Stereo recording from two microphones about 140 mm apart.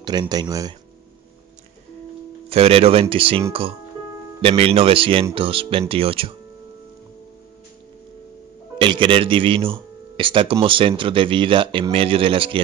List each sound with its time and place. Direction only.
0.0 s speech: 30° right (ahead or behind)
2.5 s speech: 45° right (ahead or behind)
8.7 s speech: 35° right (ahead or behind)